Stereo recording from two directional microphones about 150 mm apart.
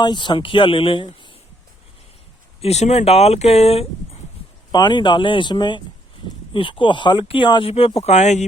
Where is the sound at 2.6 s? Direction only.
45° left (ahead or behind).